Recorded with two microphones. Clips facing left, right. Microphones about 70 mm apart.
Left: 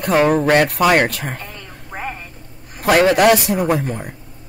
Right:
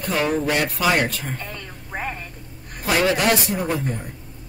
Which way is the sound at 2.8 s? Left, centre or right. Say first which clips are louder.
Left 7 dB; left.